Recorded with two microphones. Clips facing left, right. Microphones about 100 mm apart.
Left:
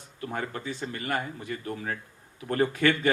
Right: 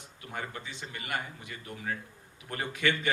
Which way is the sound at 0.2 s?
45° left (ahead or behind).